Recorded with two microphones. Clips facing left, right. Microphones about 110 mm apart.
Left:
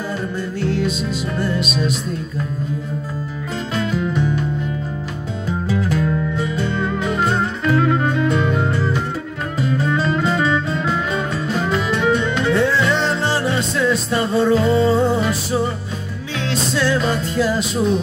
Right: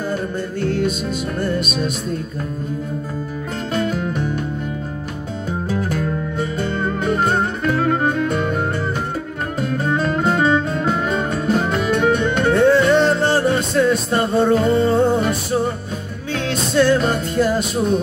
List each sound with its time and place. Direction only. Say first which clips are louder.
0.6 s music: right 1 dB; 50° right (ahead or behind)
3.7 s music: even; 50° right (ahead or behind)
5.7 s music: left 3 dB; 50° right (ahead or behind)